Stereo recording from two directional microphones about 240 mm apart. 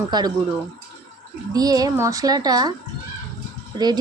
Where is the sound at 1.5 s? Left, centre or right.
Centre.